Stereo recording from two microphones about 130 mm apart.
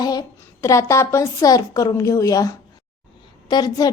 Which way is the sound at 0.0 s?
30° left (ahead or behind).